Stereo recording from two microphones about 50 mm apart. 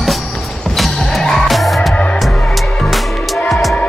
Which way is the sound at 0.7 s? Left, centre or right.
Centre.